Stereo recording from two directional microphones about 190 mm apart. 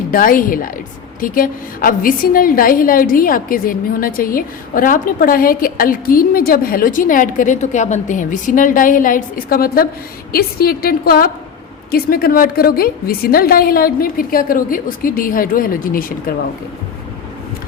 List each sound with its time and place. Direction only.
0.1 s a woman's voice: 45° left (ahead or behind)